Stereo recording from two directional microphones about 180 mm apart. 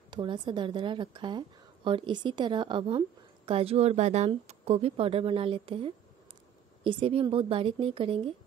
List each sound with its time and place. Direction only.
0.1 s speech: 25° right (ahead or behind)